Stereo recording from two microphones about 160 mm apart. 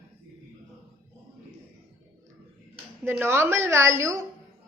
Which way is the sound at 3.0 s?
15° right (ahead or behind).